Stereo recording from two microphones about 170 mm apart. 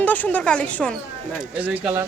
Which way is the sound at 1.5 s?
10° right (ahead or behind).